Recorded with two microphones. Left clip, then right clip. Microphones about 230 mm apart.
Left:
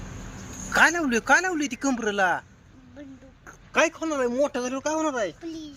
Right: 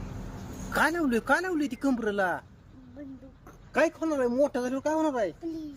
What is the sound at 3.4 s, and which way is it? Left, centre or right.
Speech, centre.